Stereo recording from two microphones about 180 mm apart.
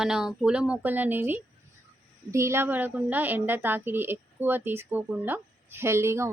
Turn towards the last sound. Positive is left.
turn(degrees=-15)  # may be behind; listen again after turning